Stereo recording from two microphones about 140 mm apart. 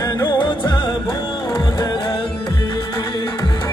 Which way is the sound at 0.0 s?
30° left (ahead or behind).